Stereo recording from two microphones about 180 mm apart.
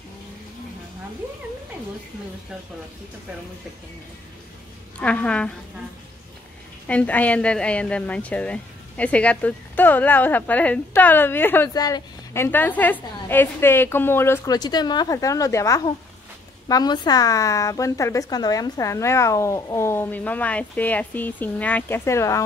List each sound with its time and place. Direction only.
4.9 s a woman's voice: 5° left (ahead or behind)
6.9 s a woman's voice: 10° left (ahead or behind)
12.4 s a woman's voice: 10° left (ahead or behind)